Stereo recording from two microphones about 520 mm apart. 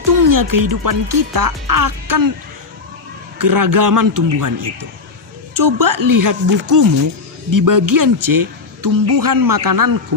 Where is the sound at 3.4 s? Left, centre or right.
Right.